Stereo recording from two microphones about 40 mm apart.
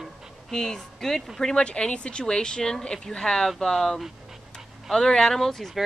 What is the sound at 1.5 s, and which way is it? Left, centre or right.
A woman's voice, left.